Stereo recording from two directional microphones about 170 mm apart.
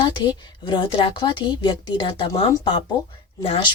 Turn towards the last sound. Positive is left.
turn(degrees=30)  # may be behind; listen again after turning